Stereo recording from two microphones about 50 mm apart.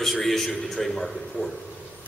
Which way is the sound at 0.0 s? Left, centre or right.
Centre.